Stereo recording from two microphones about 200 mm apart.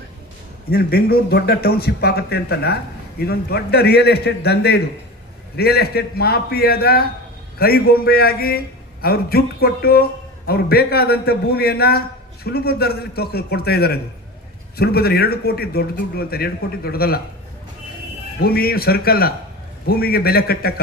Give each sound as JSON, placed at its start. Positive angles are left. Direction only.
{"t": 0.7, "sound": "a man's voice", "side_deg": 50}
{"t": 18.4, "sound": "a man's voice", "side_deg": 50}